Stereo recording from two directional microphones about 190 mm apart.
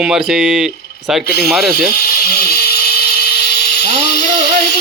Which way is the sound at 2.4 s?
55° left (ahead or behind).